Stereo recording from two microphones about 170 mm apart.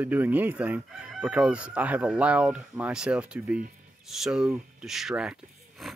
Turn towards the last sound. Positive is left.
turn(degrees=0)  # may be behind; listen again after turning